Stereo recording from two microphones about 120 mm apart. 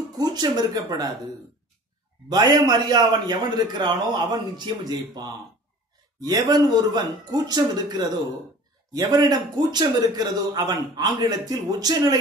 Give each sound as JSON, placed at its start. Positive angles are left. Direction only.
{"t": 0.2, "sound": "speech", "side_deg": -35}
{"t": 2.2, "sound": "a man's voice", "side_deg": -30}